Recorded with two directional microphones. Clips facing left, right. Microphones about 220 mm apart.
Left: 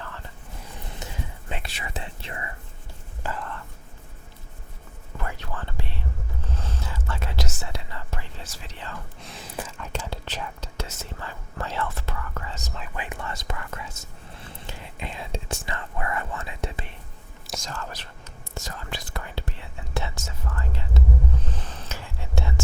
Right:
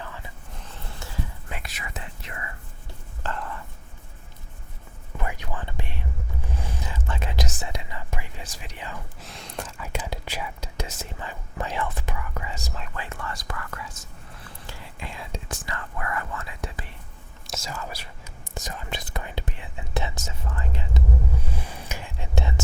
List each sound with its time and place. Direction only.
0.0 s vehicle: 10° right (ahead or behind)
0.6 s whispering: 15° left (ahead or behind)
3.2 s speech: centre (ahead or behind)
5.1 s whispering: 15° right (ahead or behind)
9.2 s speech: centre (ahead or behind)
9.7 s whispering: 5° right (ahead or behind)
10.0 s speech: 10° right (ahead or behind)
12.9 s speech: 15° left (ahead or behind)
17.4 s speech: 5° right (ahead or behind)
18.5 s whispering: 15° right (ahead or behind)
20.2 s speech: 15° right (ahead or behind)
21.4 s whispering: 10° right (ahead or behind)